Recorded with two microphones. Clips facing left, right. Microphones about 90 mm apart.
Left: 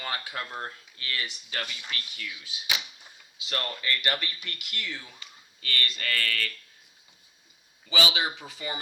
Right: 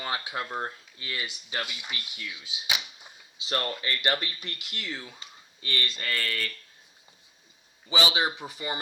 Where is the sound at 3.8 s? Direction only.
25° right (ahead or behind).